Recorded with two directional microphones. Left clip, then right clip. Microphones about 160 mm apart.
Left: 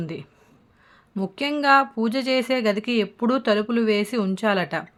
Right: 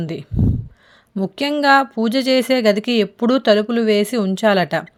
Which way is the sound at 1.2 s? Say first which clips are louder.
Right 6 dB; 30° right (ahead or behind).